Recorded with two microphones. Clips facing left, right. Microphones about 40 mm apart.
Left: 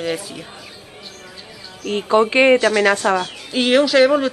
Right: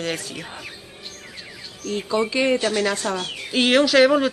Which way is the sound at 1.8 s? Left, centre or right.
Left.